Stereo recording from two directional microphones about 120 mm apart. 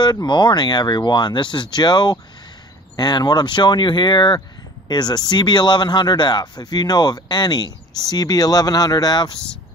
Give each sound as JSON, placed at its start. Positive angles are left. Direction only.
{"t": 0.0, "sound": "speech", "side_deg": 40}